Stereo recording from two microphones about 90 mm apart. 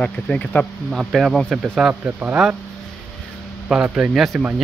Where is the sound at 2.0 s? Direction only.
20° right (ahead or behind).